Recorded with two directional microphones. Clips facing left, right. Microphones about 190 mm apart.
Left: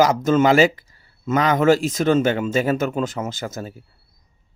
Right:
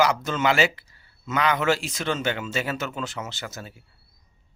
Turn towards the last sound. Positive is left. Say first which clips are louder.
# left 8 dB
turn(degrees=45)  # may be behind; listen again after turning